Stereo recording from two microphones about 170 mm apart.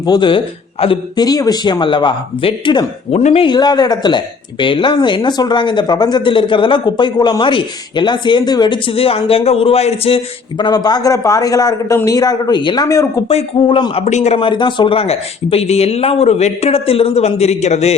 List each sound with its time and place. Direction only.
0.0 s speech: 25° left (ahead or behind)
10.6 s speech: 25° left (ahead or behind)
13.2 s speech: 35° left (ahead or behind)